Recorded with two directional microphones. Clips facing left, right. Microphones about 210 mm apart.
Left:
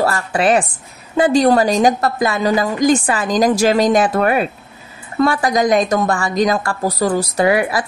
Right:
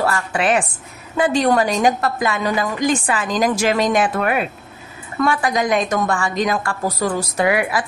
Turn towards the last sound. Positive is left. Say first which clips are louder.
# left 3 dB
turn(degrees=35)  # may be behind; listen again after turning